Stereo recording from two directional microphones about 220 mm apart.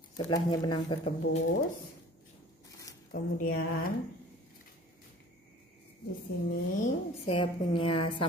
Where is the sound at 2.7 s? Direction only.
15° left (ahead or behind).